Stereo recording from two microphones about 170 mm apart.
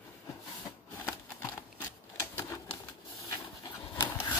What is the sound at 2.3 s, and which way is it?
Typewriter, 15° left (ahead or behind).